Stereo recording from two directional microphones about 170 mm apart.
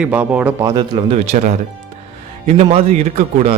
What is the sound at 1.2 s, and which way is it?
Speech, 45° right (ahead or behind).